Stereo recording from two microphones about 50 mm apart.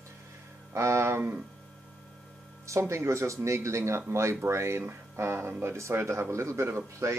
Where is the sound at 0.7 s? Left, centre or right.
Right.